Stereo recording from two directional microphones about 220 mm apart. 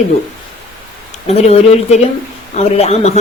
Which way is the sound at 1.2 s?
30° left (ahead or behind).